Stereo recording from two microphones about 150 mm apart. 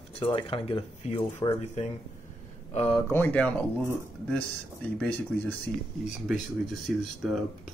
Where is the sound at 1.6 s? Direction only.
50° left (ahead or behind).